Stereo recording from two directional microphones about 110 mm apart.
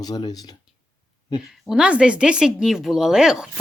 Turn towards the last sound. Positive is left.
turn(degrees=-5)  # may be behind; listen again after turning